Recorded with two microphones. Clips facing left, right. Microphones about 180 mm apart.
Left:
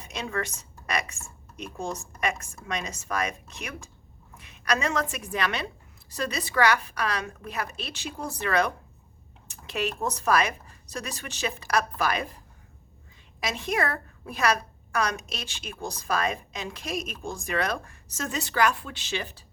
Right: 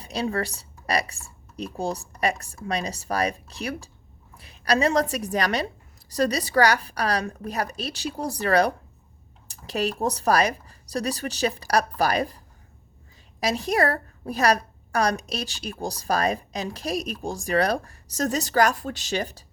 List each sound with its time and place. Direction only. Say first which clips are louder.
0.0 s a woman's voice: right 5 dB; 35° right (ahead or behind)
13.4 s a woman's voice: right 5 dB; 40° right (ahead or behind)